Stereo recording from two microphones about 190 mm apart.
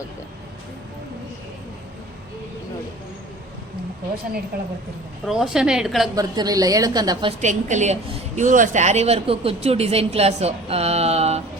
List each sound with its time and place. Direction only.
5.2 s a woman's voice: centre (ahead or behind)
6.1 s a woman's voice: 20° right (ahead or behind)
7.4 s a woman's voice: 40° right (ahead or behind)